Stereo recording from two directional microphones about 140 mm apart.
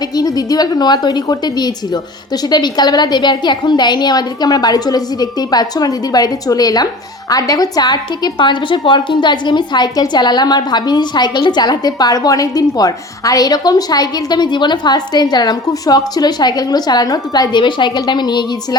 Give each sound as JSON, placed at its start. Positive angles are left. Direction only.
{"t": 0.2, "sound": "a woman's voice", "side_deg": 25}